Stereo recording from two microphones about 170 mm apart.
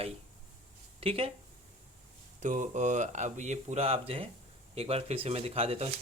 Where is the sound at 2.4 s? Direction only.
45° right (ahead or behind).